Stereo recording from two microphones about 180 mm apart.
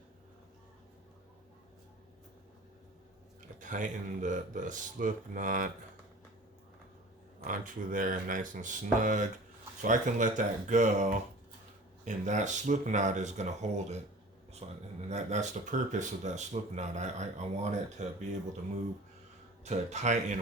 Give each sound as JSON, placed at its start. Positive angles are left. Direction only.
{"t": 3.6, "sound": "speech", "side_deg": -45}
{"t": 7.4, "sound": "speech", "side_deg": -45}
{"t": 19.6, "sound": "speech", "side_deg": -40}